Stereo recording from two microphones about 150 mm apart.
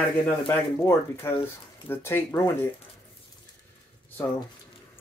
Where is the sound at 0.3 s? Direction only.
15° left (ahead or behind).